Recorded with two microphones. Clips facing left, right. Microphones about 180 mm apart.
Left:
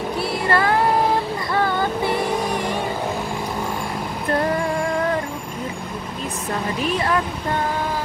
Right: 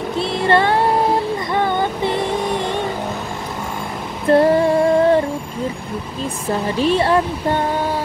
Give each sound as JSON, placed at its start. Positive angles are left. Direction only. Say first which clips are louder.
{"t": 0.2, "sound": "music", "louder": "right 5 dB", "side_deg": -25}
{"t": 1.5, "sound": "vehicle", "louder": "right 1 dB", "side_deg": -20}
{"t": 4.3, "sound": "music", "louder": "right 9 dB", "side_deg": -30}
{"t": 6.8, "sound": "speech", "louder": "right 7 dB", "side_deg": -30}